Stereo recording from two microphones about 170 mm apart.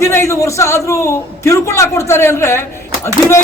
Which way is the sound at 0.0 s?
15° left (ahead or behind).